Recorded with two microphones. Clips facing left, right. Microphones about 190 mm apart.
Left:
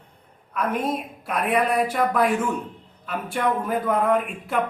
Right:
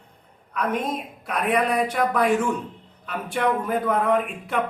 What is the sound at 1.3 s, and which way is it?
Speech, 5° left (ahead or behind).